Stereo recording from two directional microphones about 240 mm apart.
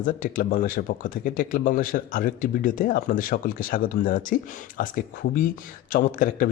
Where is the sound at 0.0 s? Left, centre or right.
Left.